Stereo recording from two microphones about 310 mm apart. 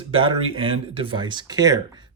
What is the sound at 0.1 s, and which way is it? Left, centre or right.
Speech, centre.